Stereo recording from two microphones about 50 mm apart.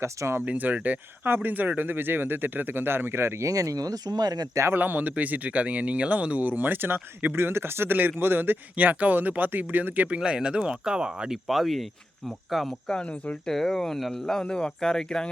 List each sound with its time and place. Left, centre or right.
0.0 s speech: right
0.4 s speech: right
4.7 s speech: right
7.3 s speech: right
8.7 s speech: right
10.2 s speech: centre
11.3 s speech: centre
12.9 s speech: left
13.4 s speech: centre